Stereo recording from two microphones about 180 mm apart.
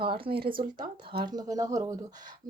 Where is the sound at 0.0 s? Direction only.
60° right (ahead or behind).